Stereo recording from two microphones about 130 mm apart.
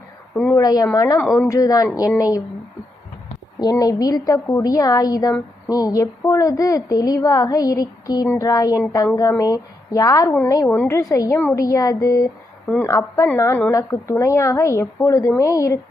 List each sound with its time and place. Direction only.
0.3 s speech: 15° left (ahead or behind)
0.6 s a woman's voice: 30° left (ahead or behind)
3.6 s a woman's voice: 30° left (ahead or behind)
10.7 s a woman's voice: 15° left (ahead or behind)